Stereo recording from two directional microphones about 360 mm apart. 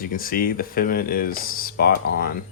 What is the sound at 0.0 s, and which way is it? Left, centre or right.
Speech, left.